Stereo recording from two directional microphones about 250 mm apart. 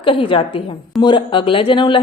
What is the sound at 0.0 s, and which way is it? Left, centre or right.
A woman's voice, left.